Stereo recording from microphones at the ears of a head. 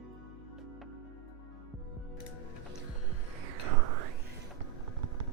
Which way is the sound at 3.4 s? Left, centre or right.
Right.